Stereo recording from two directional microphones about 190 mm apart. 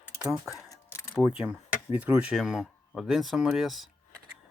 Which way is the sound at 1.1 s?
5° right (ahead or behind).